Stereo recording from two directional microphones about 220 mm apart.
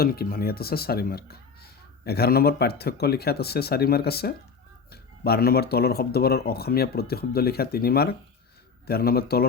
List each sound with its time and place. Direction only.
0.0 s speech: 45° left (ahead or behind)